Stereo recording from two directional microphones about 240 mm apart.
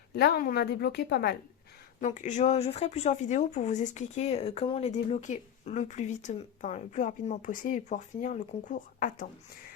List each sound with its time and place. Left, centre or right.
0.1 s a woman's voice: left
2.0 s speech: left